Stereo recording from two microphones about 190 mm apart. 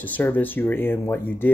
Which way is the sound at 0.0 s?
10° left (ahead or behind).